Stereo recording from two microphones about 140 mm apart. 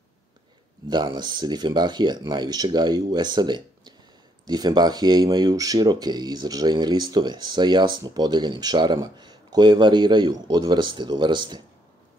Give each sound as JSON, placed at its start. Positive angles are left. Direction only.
{"t": 0.8, "sound": "speech", "side_deg": -30}